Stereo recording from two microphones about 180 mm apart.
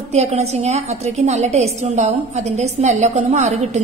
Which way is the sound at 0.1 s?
35° right (ahead or behind).